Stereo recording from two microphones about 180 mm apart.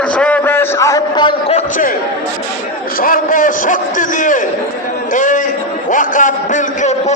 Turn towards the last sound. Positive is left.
turn(degrees=40)  # may be behind; listen again after turning